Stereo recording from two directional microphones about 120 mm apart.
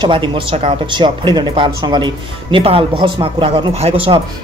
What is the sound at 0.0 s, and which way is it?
Speech, 45° right (ahead or behind).